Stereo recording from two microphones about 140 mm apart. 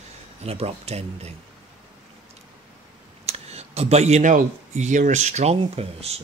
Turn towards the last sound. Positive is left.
turn(degrees=-45)  # may be behind; listen again after turning